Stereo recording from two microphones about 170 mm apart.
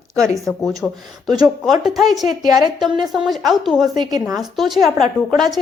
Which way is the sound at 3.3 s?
Centre (ahead or behind).